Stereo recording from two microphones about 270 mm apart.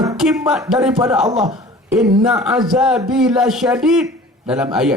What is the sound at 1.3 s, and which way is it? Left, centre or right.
Speech, right.